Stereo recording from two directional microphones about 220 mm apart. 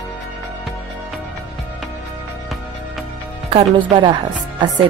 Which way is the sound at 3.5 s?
20° right (ahead or behind).